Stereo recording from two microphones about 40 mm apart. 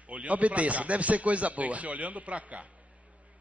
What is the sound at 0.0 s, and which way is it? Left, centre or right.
A man's voice, right.